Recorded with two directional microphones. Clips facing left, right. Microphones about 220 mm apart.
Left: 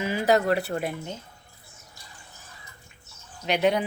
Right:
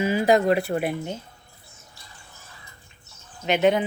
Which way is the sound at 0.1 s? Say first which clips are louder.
Right 2 dB; 15° right (ahead or behind).